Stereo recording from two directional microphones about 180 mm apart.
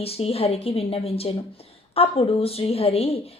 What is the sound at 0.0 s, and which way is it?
A woman's voice, 35° left (ahead or behind).